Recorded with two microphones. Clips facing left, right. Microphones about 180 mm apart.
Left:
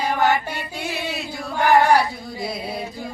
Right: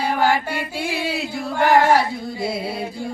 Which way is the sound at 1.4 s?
25° right (ahead or behind).